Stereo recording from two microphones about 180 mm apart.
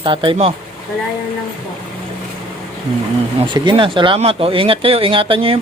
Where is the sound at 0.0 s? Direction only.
30° right (ahead or behind).